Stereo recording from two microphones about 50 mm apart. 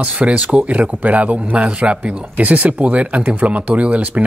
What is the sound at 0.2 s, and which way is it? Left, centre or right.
A man's voice, right.